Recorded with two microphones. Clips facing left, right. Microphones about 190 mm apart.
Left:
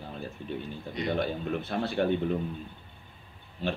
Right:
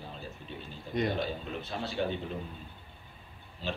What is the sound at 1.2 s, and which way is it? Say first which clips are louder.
Speech: left 5 dB; 55° left (ahead or behind).